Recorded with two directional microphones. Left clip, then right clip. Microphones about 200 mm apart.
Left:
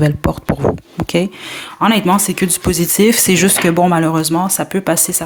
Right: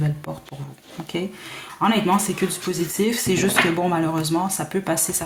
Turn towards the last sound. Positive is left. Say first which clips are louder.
# left 8 dB
turn(degrees=40)  # may be behind; listen again after turning